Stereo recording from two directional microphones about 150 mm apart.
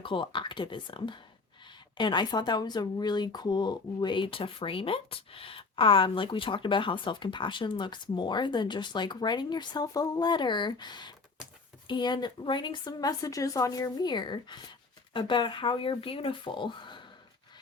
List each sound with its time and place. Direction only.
0.0 s speech: 35° left (ahead or behind)